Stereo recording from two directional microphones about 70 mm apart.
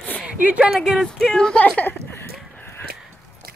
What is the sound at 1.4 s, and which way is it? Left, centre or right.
Speech, centre.